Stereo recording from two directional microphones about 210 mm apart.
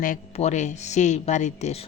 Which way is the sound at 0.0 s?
35° left (ahead or behind).